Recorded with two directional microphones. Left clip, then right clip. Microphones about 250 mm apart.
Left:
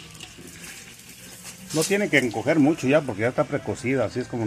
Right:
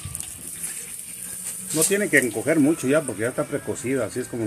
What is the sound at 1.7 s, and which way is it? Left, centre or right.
Speech, centre.